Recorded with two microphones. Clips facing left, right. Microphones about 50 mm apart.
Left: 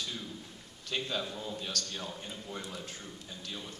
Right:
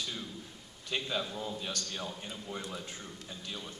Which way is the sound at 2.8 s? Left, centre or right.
Right.